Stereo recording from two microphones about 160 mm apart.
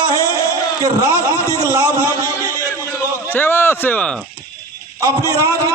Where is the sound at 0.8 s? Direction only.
20° right (ahead or behind).